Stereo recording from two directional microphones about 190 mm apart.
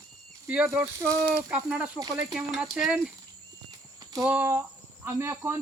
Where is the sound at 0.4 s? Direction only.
5° right (ahead or behind).